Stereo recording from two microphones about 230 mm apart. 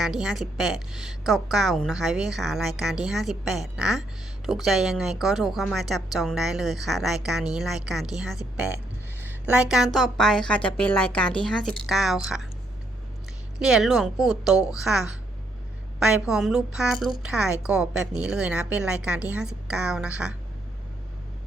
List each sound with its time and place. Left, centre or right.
0.0 s a woman's voice: centre
13.6 s a woman's voice: centre